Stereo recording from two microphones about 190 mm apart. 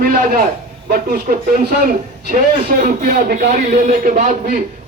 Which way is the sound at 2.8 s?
50° right (ahead or behind).